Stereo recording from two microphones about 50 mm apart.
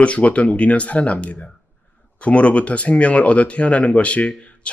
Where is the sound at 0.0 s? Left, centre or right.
Left.